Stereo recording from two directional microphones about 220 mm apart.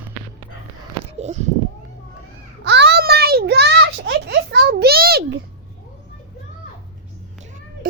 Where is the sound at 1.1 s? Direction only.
30° right (ahead or behind).